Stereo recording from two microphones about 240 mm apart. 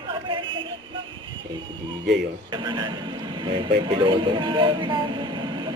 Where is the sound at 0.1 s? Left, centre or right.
Right.